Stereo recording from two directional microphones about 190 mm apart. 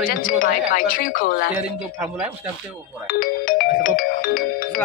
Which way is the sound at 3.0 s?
50° left (ahead or behind).